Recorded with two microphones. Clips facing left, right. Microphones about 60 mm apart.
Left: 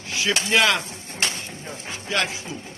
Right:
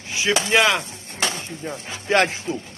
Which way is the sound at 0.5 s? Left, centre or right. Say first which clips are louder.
Right 1 dB; centre.